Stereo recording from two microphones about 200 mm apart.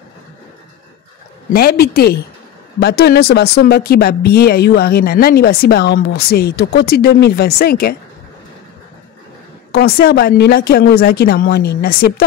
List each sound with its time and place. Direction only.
1.5 s speech: 50° left (ahead or behind)
9.7 s speech: 50° left (ahead or behind)